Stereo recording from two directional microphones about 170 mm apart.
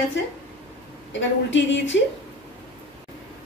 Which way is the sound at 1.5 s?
90° left.